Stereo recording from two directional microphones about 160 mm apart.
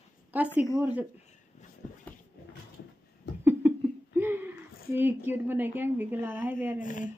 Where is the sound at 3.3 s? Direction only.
90° left.